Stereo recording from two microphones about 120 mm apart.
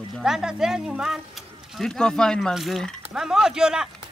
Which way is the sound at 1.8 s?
5° left (ahead or behind).